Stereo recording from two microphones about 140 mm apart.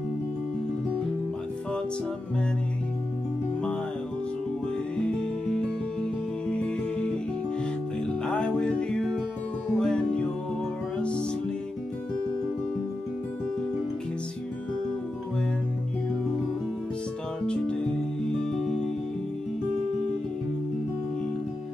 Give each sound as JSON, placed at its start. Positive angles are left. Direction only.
{"t": 4.9, "sound": "music", "side_deg": 5}
{"t": 8.3, "sound": "music", "side_deg": 5}
{"t": 17.5, "sound": "music", "side_deg": 5}